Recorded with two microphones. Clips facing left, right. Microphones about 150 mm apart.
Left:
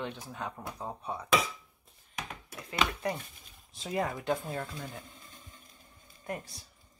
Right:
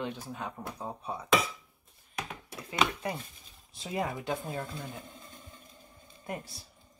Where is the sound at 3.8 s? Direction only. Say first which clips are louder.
Left 1 dB; 20° right (ahead or behind).